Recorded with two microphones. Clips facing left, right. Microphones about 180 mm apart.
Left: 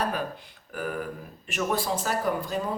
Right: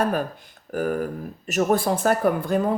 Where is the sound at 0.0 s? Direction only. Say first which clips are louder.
Right 6 dB; 50° right (ahead or behind).